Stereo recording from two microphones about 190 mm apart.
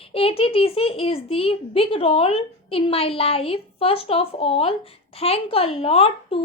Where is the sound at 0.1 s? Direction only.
30° left (ahead or behind).